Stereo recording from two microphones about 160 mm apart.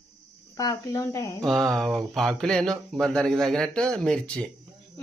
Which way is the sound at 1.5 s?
Centre (ahead or behind).